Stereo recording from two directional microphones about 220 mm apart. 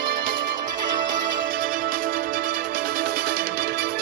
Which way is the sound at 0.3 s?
40° right (ahead or behind).